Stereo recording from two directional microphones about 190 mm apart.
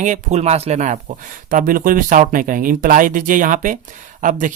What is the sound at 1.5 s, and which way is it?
Speech, 45° right (ahead or behind).